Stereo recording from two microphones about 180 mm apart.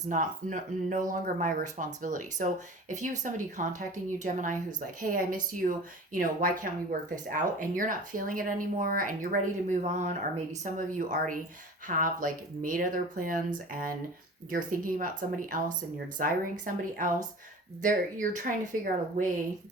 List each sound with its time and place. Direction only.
0.0 s speech: 45° right (ahead or behind)